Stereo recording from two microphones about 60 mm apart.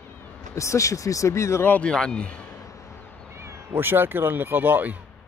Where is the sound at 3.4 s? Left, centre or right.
Right.